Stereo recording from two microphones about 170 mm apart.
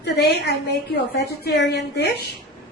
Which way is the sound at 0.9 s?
85° left.